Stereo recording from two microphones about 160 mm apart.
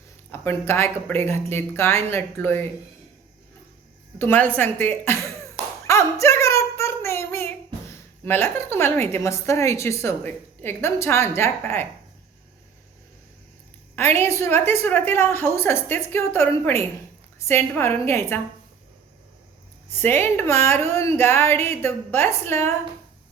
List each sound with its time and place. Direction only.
0.3 s a woman's voice: 15° left (ahead or behind)
4.2 s a woman's voice: 10° left (ahead or behind)
5.9 s a sound: 20° left (ahead or behind)
8.2 s a woman's voice: 15° left (ahead or behind)
14.2 s a woman's voice: 15° left (ahead or behind)
19.9 s a woman's voice: 15° left (ahead or behind)